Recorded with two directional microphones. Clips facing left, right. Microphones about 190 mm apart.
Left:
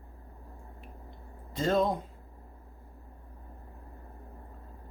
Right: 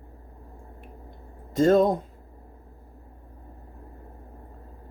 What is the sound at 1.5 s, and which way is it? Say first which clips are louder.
Speech: right 8 dB; 45° right (ahead or behind).